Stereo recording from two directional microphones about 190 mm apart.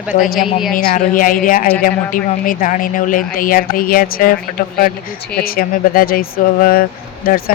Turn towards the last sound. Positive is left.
turn(degrees=50)  # may be behind; listen again after turning